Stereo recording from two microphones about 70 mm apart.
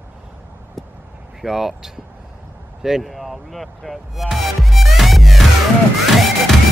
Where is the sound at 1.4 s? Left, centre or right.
Centre.